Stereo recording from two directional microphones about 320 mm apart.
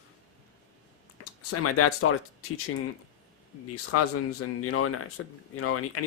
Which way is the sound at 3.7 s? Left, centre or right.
Left.